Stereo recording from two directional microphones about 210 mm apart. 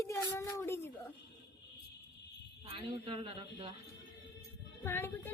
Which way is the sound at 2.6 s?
25° right (ahead or behind).